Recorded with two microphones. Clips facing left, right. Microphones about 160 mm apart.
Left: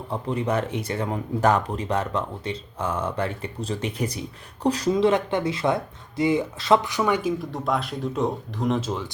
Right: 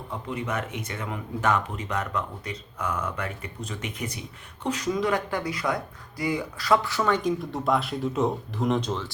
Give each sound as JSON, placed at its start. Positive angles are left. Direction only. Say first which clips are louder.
{"t": 0.1, "sound": "speech", "louder": "left 6 dB", "side_deg": 35}